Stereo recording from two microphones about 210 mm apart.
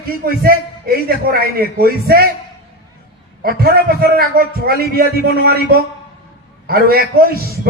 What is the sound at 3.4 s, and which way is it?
A man's voice, 45° right (ahead or behind).